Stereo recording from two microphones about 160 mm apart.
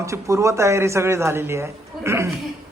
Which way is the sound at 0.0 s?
20° right (ahead or behind).